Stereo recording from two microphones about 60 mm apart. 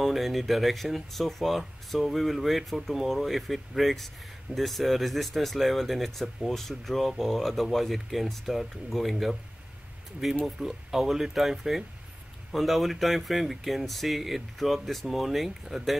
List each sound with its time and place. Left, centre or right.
0.0 s speech: centre
10.4 s speech: centre